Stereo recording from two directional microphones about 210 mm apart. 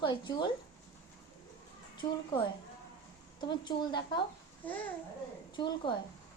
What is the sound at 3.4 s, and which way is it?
Speech, 20° left (ahead or behind).